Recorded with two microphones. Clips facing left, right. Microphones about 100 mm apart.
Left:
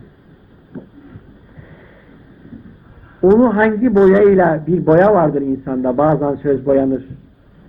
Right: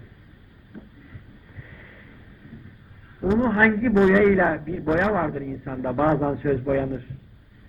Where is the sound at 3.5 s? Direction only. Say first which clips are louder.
Left 7 dB; 25° left (ahead or behind).